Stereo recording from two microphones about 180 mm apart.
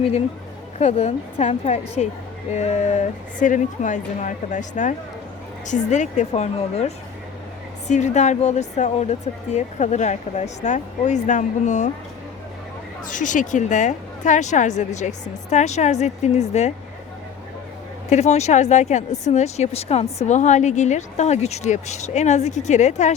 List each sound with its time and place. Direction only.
0.8 s speech: 35° left (ahead or behind)
13.1 s speech: 45° left (ahead or behind)
18.1 s speech: 40° left (ahead or behind)